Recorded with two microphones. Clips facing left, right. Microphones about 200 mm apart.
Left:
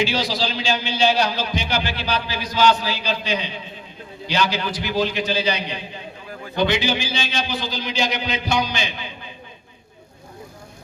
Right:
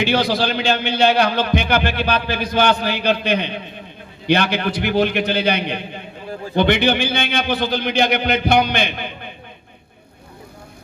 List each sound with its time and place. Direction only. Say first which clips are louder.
0.0 s a man's voice: right 4 dB; 60° right (ahead or behind)